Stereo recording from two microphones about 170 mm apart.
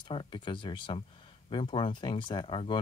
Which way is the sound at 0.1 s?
30° left (ahead or behind).